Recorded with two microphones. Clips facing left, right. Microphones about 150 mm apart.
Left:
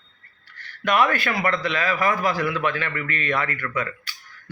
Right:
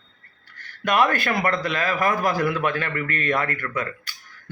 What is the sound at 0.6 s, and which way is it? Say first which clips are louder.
A man's voice: even; 45° right (ahead or behind).